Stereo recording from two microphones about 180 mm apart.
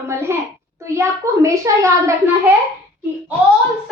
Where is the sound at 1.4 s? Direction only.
15° right (ahead or behind).